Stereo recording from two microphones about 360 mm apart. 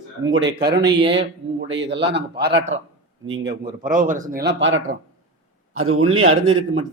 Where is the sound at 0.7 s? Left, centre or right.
Centre.